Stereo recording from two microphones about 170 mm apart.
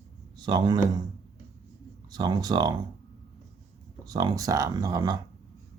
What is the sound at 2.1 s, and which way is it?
Speech, 25° right (ahead or behind).